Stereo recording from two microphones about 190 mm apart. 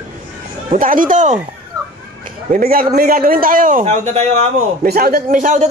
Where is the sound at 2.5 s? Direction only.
50° right (ahead or behind).